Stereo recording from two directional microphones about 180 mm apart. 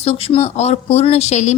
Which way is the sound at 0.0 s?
35° left (ahead or behind).